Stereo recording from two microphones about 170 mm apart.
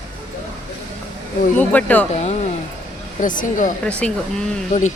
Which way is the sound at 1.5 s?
10° left (ahead or behind).